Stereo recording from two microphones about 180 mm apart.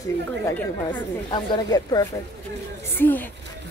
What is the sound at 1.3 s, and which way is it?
Speech, 25° left (ahead or behind).